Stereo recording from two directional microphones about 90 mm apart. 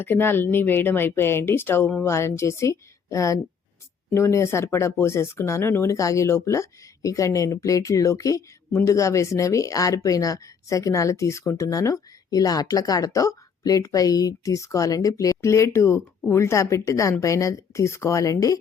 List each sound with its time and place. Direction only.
0.0 s speech: 25° left (ahead or behind); by 18.6 s 40° left (ahead or behind)